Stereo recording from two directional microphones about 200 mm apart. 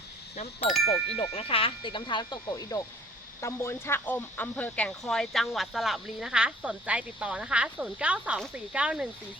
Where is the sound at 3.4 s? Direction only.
15° left (ahead or behind).